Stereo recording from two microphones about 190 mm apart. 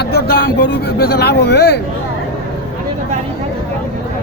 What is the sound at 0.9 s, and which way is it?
Speech, 55° left (ahead or behind).